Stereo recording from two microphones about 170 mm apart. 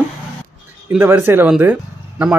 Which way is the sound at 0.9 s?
10° right (ahead or behind).